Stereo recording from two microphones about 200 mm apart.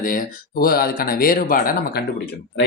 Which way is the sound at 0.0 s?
45° left (ahead or behind).